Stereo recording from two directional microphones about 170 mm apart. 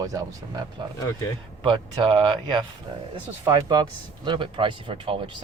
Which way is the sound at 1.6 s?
30° right (ahead or behind).